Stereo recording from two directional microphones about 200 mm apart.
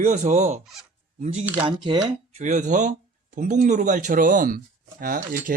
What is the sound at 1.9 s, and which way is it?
Speech, 35° right (ahead or behind).